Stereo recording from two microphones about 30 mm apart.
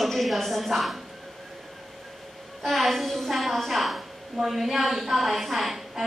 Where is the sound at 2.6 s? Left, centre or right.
Centre.